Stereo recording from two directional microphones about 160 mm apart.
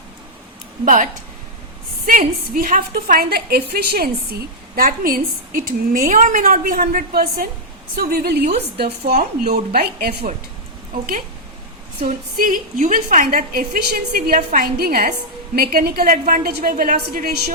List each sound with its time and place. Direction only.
2.0 s a woman's voice: 60° right (ahead or behind); by 10.2 s 85° right
10.9 s a woman's voice: 60° right (ahead or behind); by 17.5 s 75° right (ahead or behind)